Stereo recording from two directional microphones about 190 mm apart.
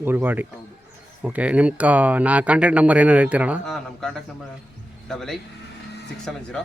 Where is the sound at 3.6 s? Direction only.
5° left (ahead or behind).